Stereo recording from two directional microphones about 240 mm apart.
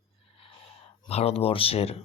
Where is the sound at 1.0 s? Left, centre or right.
Left.